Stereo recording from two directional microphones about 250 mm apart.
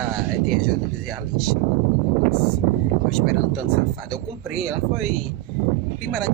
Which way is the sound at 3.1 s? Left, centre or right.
Centre.